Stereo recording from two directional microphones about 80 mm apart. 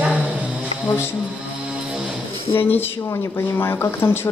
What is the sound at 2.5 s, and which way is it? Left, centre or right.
Speech, left.